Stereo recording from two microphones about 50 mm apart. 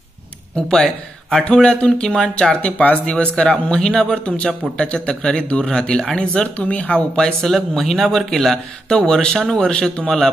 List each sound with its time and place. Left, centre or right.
0.6 s a man's voice: centre
6.7 s a man's voice: left
7.4 s speech: centre
8.8 s speech: centre